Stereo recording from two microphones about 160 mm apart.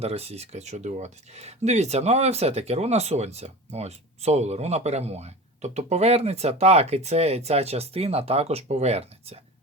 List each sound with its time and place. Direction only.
0.0 s speech: 40° right (ahead or behind)